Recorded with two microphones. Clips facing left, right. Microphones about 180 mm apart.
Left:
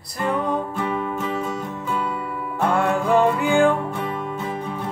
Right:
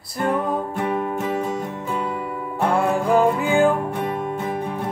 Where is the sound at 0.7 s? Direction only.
45° right (ahead or behind).